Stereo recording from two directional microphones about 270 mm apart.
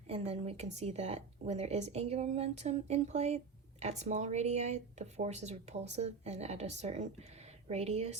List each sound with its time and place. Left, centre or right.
0.1 s speech: right